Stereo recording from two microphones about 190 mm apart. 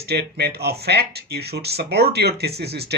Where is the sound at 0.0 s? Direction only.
60° right (ahead or behind).